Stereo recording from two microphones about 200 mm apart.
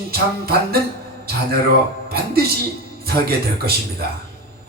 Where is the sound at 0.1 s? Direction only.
50° right (ahead or behind).